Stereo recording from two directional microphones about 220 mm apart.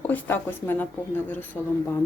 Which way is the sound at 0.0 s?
10° left (ahead or behind).